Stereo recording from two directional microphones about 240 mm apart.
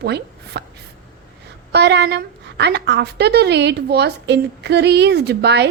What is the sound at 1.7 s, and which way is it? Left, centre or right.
A woman's voice, right.